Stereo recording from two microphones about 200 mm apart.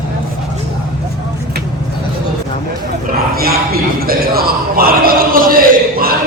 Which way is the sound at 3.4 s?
50° right (ahead or behind).